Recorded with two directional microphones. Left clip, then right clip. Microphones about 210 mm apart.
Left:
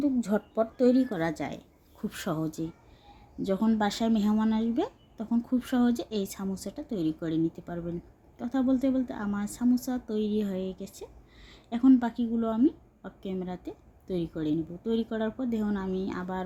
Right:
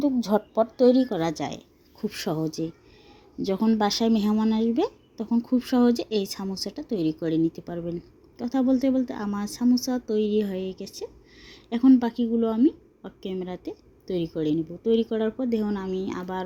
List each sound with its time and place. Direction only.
0.0 s speech: 10° right (ahead or behind)